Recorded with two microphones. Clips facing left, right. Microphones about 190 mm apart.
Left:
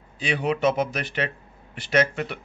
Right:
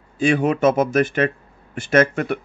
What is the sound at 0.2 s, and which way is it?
Speech, 50° right (ahead or behind).